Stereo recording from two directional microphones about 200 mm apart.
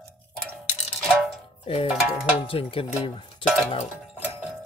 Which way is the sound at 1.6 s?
30° left (ahead or behind).